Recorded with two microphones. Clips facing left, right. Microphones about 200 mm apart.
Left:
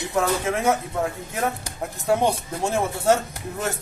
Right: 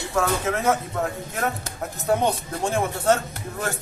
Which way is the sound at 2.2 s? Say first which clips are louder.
Left 1 dB; 10° left (ahead or behind).